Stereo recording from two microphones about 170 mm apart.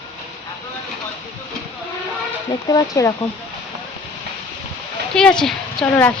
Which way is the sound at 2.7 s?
20° left (ahead or behind).